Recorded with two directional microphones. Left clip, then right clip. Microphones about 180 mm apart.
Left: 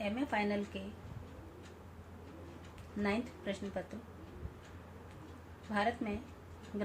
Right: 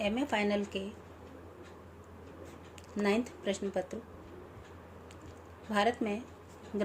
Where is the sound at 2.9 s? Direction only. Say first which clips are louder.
Right 6 dB; 55° right (ahead or behind).